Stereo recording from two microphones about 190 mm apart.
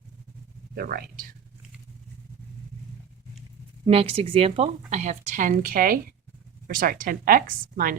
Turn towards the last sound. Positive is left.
turn(degrees=-50)  # may be behind; listen again after turning